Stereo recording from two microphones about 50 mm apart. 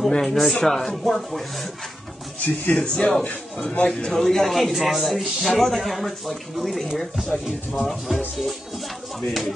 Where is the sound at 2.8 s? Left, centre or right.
Centre.